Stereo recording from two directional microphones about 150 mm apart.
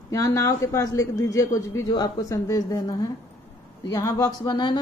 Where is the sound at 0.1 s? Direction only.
20° left (ahead or behind).